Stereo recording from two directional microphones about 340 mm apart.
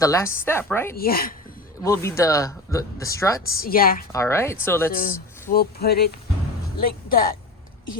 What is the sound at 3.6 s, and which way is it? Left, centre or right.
Speech, left.